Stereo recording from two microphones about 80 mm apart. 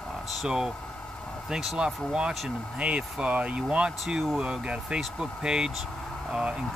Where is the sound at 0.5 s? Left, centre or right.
Centre.